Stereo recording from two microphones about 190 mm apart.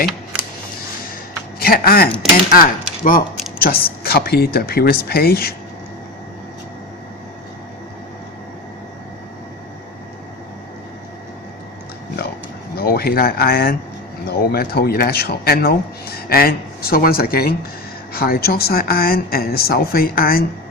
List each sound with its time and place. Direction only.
1.5 s speech: 50° left (ahead or behind)
12.7 s speech: 55° left (ahead or behind)